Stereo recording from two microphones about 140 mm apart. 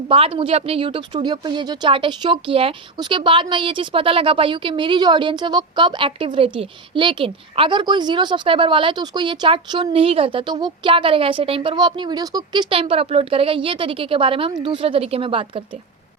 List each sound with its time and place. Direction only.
0.1 s speech: 40° right (ahead or behind)
9.8 s speech: 40° right (ahead or behind); by 12.6 s 25° right (ahead or behind)
12.7 s speech: 40° right (ahead or behind)